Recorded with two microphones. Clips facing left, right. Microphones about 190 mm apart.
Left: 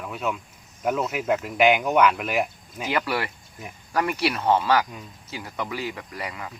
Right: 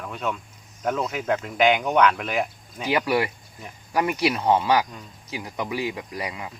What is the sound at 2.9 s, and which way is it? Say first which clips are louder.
Speech: right 4 dB; 15° right (ahead or behind).